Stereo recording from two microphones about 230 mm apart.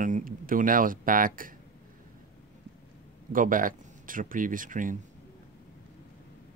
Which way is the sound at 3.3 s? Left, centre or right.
Right.